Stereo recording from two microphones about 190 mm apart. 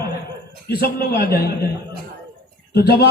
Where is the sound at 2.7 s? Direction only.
60° left (ahead or behind).